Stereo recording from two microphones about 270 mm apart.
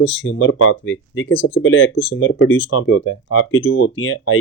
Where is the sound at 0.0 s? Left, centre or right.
Left.